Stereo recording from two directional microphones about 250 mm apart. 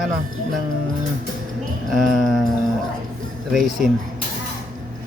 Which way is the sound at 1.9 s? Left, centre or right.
Centre.